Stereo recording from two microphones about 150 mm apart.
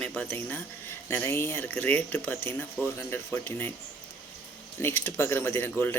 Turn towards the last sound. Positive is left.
turn(degrees=15)  # may be behind; listen again after turning